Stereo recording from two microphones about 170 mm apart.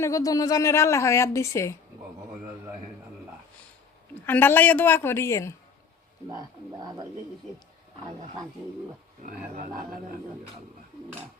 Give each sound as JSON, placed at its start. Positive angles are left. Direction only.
{"t": 0.0, "sound": "a woman's voice", "side_deg": 20}
{"t": 4.3, "sound": "a woman's voice", "side_deg": 10}
{"t": 6.3, "sound": "speech", "side_deg": -25}
{"t": 9.2, "sound": "speech", "side_deg": -55}